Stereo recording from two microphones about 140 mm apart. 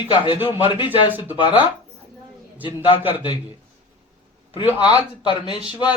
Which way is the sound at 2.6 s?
35° left (ahead or behind).